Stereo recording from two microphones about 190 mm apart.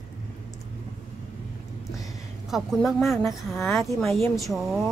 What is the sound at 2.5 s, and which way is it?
A woman's voice, centre (ahead or behind).